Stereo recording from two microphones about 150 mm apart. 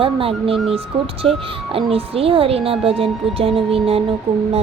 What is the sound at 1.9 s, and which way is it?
A woman's voice, 40° right (ahead or behind).